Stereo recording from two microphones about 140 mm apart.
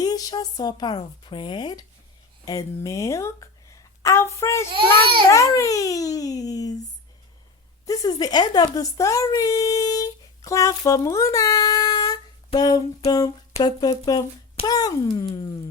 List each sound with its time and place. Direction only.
0.0 s a child's voice: 30° left (ahead or behind)
7.9 s a child's voice: 30° left (ahead or behind)